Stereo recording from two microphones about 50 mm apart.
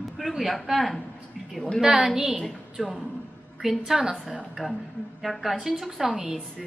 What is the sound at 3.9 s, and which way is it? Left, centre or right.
A woman's voice, centre.